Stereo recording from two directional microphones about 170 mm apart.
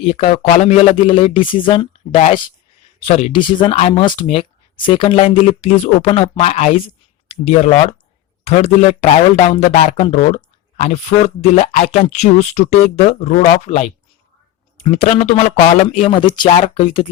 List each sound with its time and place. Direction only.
0.0 s speech: 35° left (ahead or behind)
3.3 s speech: 30° left (ahead or behind)